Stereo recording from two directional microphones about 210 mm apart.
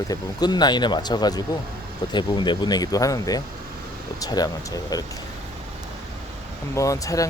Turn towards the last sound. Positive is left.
turn(degrees=15)  # may be behind; listen again after turning